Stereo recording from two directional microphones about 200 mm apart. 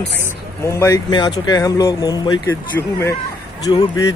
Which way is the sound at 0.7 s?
15° left (ahead or behind).